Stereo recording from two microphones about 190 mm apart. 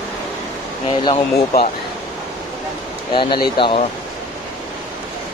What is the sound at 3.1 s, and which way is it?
Speech, 25° left (ahead or behind).